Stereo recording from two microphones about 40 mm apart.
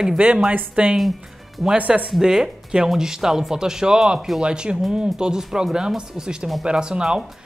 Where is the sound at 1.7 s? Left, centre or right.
Right.